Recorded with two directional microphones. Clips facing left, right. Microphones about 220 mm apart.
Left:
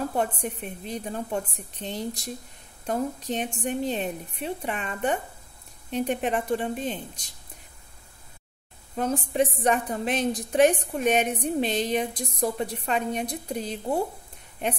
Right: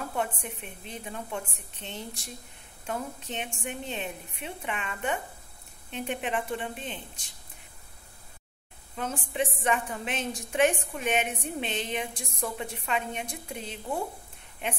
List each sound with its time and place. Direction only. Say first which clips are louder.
0.1 s a woman's voice: left 5 dB; 40° left (ahead or behind)
8.9 s a woman's voice: left 7 dB; 40° left (ahead or behind)